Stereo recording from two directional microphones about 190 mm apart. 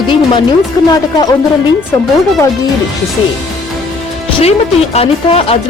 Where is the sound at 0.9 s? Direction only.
20° left (ahead or behind).